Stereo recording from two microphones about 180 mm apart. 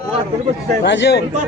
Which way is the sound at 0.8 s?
75° left (ahead or behind).